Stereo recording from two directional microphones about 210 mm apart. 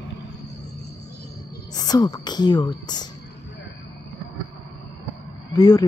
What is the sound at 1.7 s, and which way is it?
A woman's voice, 20° left (ahead or behind).